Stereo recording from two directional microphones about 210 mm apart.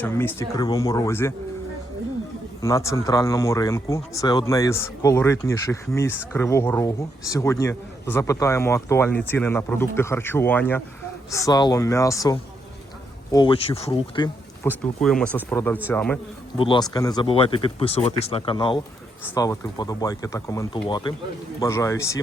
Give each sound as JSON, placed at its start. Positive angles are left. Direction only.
{"t": 0.0, "sound": "speech", "side_deg": 10}
{"t": 2.6, "sound": "speech", "side_deg": 15}
{"t": 14.6, "sound": "speech", "side_deg": 5}
{"t": 16.6, "sound": "speech", "side_deg": 25}
{"t": 19.2, "sound": "speech", "side_deg": 15}